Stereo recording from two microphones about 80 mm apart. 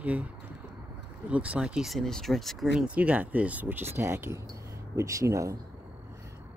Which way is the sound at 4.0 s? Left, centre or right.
Right.